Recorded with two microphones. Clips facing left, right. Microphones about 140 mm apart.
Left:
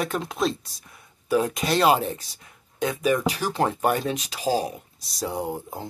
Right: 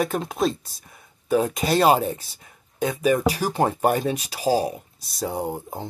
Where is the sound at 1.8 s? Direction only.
40° right (ahead or behind).